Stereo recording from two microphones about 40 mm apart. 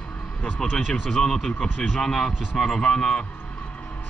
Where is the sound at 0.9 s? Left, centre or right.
Centre.